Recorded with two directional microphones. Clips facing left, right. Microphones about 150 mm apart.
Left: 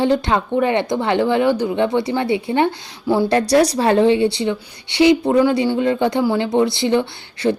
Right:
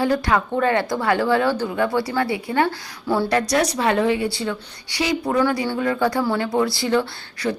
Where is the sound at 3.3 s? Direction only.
30° left (ahead or behind).